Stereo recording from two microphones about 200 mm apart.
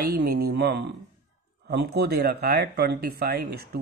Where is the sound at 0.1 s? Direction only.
50° right (ahead or behind).